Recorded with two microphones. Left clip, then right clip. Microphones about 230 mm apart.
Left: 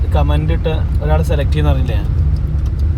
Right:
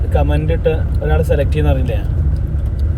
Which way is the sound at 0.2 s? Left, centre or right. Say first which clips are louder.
Even; left.